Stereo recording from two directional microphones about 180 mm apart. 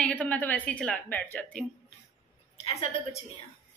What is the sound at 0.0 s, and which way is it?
A woman's voice, 10° left (ahead or behind).